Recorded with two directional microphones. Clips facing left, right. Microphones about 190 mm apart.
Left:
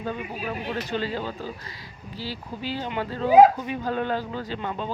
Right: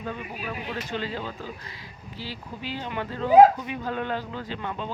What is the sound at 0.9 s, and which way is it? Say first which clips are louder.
Speech: left 3 dB; 35° left (ahead or behind).